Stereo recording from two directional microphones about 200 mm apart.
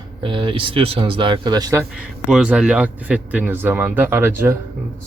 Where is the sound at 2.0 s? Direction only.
5° right (ahead or behind).